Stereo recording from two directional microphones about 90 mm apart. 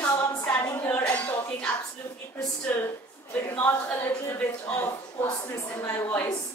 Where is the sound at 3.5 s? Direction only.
20° left (ahead or behind).